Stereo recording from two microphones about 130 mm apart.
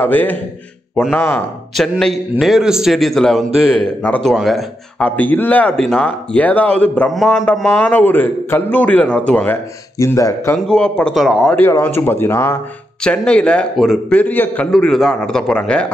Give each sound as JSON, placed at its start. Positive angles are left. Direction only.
{"t": 0.0, "sound": "speech", "side_deg": 15}
{"t": 1.8, "sound": "a man's voice", "side_deg": 5}
{"t": 5.0, "sound": "speech", "side_deg": 10}
{"t": 7.1, "sound": "a man's voice", "side_deg": 0}
{"t": 7.8, "sound": "speech", "side_deg": 15}
{"t": 9.9, "sound": "speech", "side_deg": 25}
{"t": 10.7, "sound": "a man's voice", "side_deg": 5}
{"t": 12.0, "sound": "speech", "side_deg": 15}
{"t": 13.0, "sound": "speech", "side_deg": 5}
{"t": 14.7, "sound": "a man's voice", "side_deg": 5}